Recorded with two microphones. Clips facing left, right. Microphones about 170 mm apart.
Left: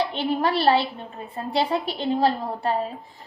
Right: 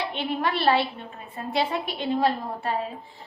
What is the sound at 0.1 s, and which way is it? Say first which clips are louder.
A woman's voice: left 4 dB; 35° left (ahead or behind).